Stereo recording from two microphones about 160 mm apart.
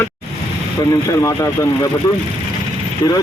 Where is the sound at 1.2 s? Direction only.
20° left (ahead or behind).